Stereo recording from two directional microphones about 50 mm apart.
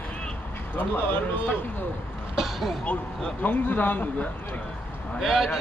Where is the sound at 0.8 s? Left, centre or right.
Left.